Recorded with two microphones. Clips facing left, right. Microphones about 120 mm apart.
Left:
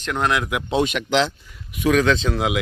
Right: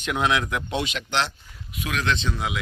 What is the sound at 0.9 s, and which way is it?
Speech, 65° left (ahead or behind).